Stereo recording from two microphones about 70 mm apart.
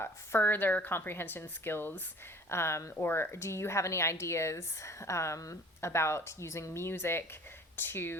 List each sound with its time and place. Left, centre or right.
0.0 s a woman's voice: left